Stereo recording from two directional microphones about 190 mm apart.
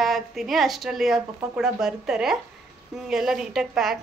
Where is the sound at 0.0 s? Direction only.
Centre (ahead or behind).